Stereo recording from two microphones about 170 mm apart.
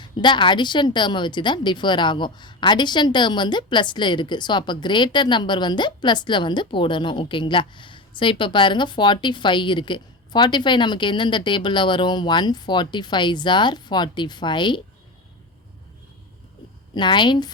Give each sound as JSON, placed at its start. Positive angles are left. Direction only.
{"t": 0.0, "sound": "a woman's voice", "side_deg": 25}
{"t": 16.9, "sound": "a woman's voice", "side_deg": 25}